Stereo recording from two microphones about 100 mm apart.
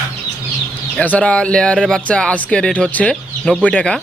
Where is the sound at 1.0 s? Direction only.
15° left (ahead or behind).